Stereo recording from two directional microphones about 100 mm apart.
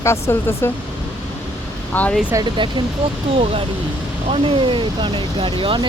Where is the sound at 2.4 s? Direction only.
50° right (ahead or behind).